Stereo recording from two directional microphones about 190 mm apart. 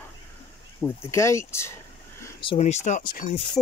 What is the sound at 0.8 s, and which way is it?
Speech, 15° left (ahead or behind).